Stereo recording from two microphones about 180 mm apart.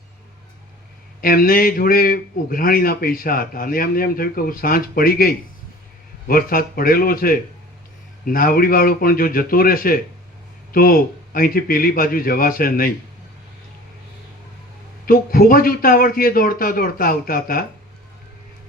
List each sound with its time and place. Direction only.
1.2 s a man's voice: 55° left (ahead or behind)
15.0 s a man's voice: 55° left (ahead or behind)